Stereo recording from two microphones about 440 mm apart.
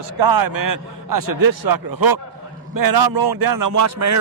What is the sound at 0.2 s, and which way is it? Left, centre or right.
Speech, right.